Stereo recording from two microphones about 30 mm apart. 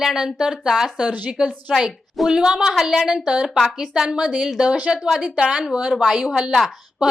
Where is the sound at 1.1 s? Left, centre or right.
Right.